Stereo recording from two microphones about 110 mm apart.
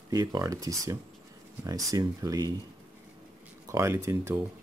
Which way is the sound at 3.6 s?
25° right (ahead or behind).